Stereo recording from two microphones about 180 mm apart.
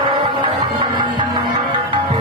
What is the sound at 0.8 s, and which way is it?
Music, 25° right (ahead or behind).